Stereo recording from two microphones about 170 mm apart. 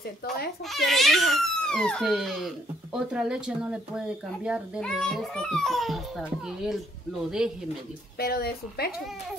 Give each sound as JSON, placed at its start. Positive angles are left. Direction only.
{"t": 0.7, "sound": "speech", "side_deg": 0}
{"t": 8.2, "sound": "speech", "side_deg": 65}